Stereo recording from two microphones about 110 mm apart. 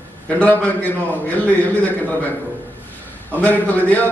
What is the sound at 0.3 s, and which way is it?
Speech, 10° left (ahead or behind).